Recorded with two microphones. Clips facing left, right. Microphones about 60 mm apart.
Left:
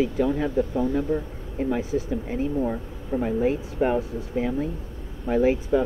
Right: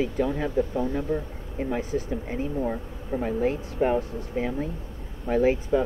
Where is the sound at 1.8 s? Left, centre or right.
Centre.